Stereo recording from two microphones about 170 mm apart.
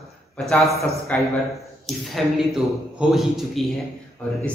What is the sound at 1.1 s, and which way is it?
A man's voice, 10° left (ahead or behind).